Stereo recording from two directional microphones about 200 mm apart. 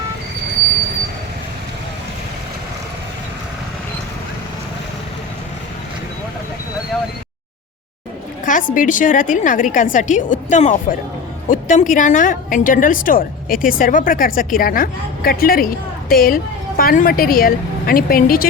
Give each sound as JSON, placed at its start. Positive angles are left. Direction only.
{"t": 8.4, "sound": "a woman's voice", "side_deg": 40}